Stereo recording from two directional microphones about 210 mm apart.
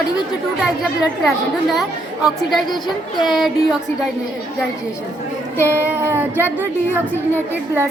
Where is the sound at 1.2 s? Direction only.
Centre (ahead or behind).